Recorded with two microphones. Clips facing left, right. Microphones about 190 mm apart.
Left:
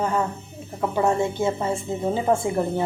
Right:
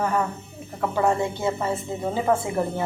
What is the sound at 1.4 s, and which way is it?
Speech, 15° left (ahead or behind).